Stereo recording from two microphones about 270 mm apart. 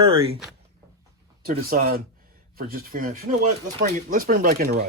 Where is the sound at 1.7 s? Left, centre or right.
Right.